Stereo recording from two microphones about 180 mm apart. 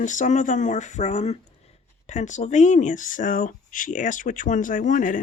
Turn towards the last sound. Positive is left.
turn(degrees=45)  # may be behind; listen again after turning